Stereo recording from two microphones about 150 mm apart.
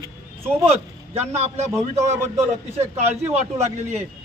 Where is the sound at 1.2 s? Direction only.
45° right (ahead or behind).